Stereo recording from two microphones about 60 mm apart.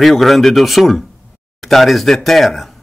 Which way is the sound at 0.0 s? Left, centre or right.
Centre.